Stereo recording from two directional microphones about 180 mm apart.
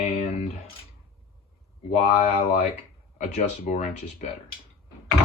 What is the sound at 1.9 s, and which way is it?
Speech, 40° left (ahead or behind).